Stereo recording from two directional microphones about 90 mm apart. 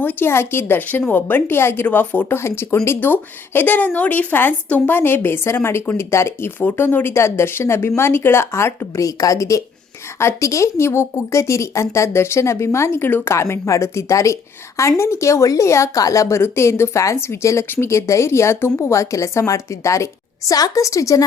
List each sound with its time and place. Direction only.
0.0 s a woman's voice: 20° left (ahead or behind); by 21.2 s 35° left (ahead or behind)